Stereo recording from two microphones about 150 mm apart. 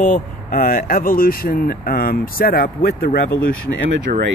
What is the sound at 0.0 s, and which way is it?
Speech, 65° left (ahead or behind).